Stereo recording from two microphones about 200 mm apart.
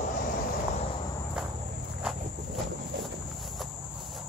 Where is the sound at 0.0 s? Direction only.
40° left (ahead or behind).